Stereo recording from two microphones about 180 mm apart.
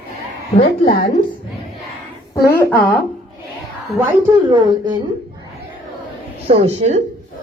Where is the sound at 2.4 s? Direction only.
10° left (ahead or behind).